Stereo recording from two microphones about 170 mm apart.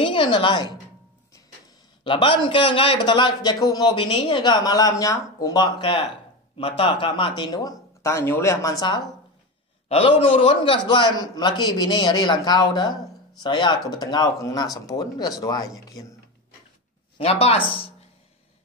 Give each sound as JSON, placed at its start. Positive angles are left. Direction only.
{"t": 0.0, "sound": "a woman's voice", "side_deg": 30}
{"t": 2.0, "sound": "a man's voice", "side_deg": 30}
{"t": 17.2, "sound": "speech", "side_deg": 35}